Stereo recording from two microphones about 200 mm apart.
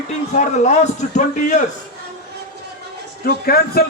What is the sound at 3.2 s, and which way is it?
Speech, 50° left (ahead or behind).